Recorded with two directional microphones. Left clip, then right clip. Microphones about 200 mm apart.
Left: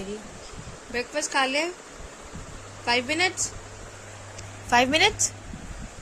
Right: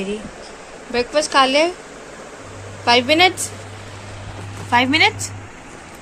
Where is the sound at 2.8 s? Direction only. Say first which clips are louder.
Right 10 dB; 5° right (ahead or behind).